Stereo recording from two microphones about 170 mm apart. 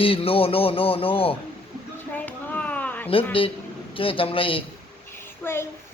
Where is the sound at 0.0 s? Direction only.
35° left (ahead or behind).